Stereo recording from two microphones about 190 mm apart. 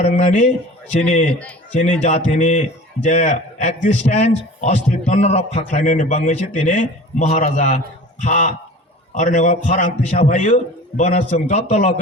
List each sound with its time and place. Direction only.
0.0 s a man's voice: 40° left (ahead or behind)